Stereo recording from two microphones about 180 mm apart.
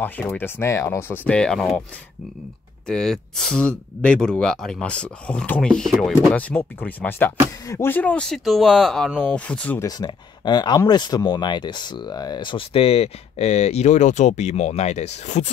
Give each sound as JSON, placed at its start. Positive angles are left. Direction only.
{"t": 0.0, "sound": "speech", "side_deg": 10}
{"t": 2.9, "sound": "speech", "side_deg": 5}
{"t": 9.8, "sound": "speech", "side_deg": 25}